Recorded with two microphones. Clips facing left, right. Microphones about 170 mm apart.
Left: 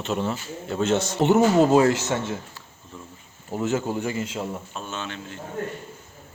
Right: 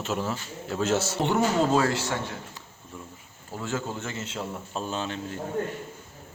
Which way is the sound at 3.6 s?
15° left (ahead or behind).